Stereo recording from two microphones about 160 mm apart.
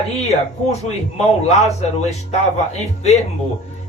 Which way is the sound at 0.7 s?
45° left (ahead or behind).